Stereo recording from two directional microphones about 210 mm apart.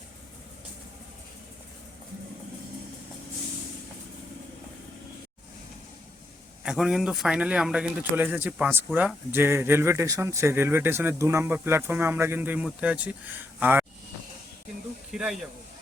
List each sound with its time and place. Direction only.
6.6 s speech: 5° right (ahead or behind)
15.1 s speech: centre (ahead or behind)